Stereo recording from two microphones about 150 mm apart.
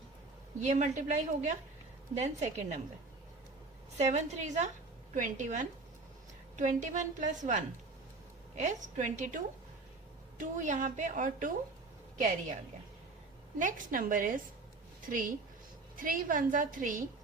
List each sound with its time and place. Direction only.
0.6 s a woman's voice: 55° right (ahead or behind)
3.9 s a woman's voice: 50° right (ahead or behind)
13.6 s a woman's voice: 60° right (ahead or behind)